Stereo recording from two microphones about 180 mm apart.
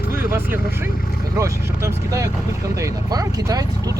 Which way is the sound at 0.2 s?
10° right (ahead or behind).